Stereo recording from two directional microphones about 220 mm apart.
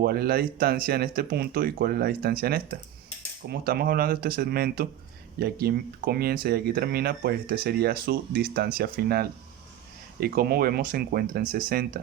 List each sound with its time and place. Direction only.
0.0 s speech: 45° right (ahead or behind)